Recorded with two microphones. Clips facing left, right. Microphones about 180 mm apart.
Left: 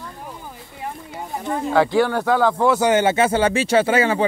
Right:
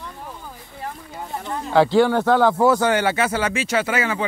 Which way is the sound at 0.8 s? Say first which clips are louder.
Left 2 dB; 15° left (ahead or behind).